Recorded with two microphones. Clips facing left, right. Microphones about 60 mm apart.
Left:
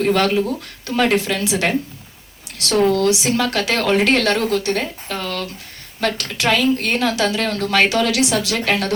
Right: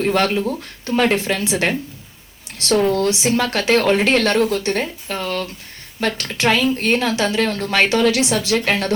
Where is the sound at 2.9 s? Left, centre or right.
Right.